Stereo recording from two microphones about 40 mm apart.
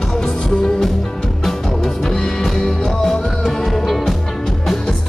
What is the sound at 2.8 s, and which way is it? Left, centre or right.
Music, centre.